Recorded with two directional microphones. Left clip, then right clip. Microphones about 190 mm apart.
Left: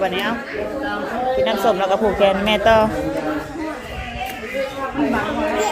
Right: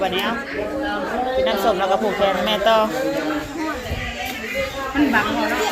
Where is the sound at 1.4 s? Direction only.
40° left (ahead or behind).